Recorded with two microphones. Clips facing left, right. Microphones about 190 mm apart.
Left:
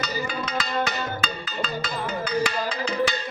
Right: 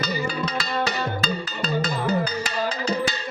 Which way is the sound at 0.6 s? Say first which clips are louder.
Even; 35° right (ahead or behind).